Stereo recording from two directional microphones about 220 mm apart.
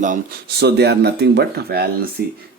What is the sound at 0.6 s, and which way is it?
Speech, 50° right (ahead or behind).